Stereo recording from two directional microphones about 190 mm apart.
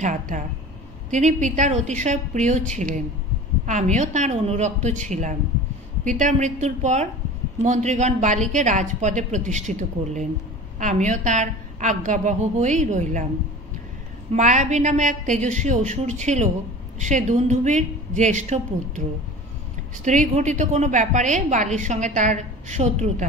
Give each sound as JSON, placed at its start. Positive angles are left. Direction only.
{"t": 0.0, "sound": "a woman's voice", "side_deg": -40}
{"t": 14.3, "sound": "a woman's voice", "side_deg": -40}
{"t": 20.1, "sound": "a woman's voice", "side_deg": -40}